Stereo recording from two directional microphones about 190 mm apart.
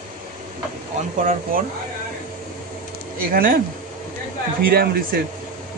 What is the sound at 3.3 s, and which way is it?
Speech, 50° right (ahead or behind).